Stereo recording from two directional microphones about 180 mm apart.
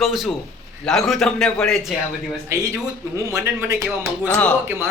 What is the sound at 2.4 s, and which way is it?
Speech, 15° right (ahead or behind).